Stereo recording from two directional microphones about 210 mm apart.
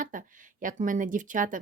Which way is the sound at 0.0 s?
40° right (ahead or behind).